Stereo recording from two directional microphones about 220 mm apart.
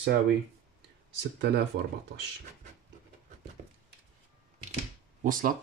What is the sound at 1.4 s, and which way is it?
Speech, 50° right (ahead or behind).